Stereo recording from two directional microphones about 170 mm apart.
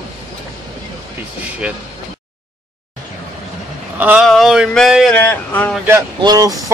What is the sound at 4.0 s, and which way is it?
Speech, 5° right (ahead or behind).